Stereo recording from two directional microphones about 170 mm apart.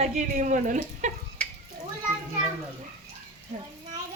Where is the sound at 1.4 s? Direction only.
5° left (ahead or behind).